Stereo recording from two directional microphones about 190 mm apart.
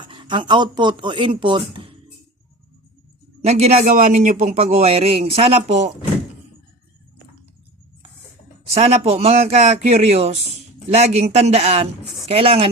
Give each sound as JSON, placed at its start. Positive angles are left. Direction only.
{"t": 0.0, "sound": "speech", "side_deg": -25}
{"t": 3.4, "sound": "a man's voice", "side_deg": -35}
{"t": 8.7, "sound": "a man's voice", "side_deg": -35}